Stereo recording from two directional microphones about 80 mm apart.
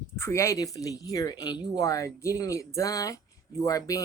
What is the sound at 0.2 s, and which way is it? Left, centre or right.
A woman's voice, left.